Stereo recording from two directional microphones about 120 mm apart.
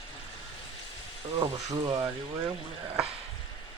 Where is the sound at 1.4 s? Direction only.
35° right (ahead or behind).